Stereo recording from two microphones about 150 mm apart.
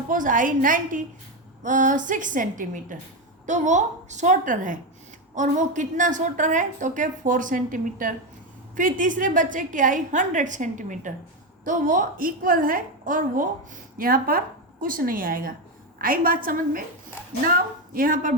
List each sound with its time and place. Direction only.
0.1 s a woman's voice: 60° right (ahead or behind)
14.0 s a woman's voice: 75° right (ahead or behind)